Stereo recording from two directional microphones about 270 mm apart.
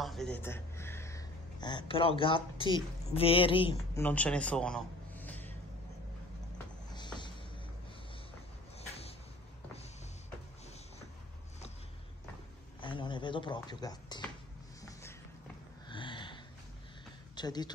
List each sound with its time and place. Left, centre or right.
0.0 s speech: centre
4.0 s a man's voice: centre
6.9 s music: centre
8.7 s cupboard open or close: left
12.8 s speech: centre
14.8 s a sound: centre
17.4 s speech: centre